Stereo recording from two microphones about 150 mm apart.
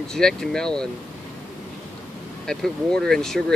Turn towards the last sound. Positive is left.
turn(degrees=5)  # may be behind; listen again after turning